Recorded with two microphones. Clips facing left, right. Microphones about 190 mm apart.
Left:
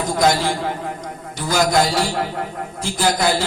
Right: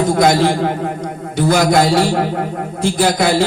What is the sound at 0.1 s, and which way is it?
A man's voice, 60° right (ahead or behind).